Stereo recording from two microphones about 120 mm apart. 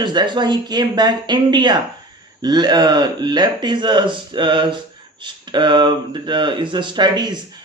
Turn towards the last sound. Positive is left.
turn(degrees=-35)  # may be behind; listen again after turning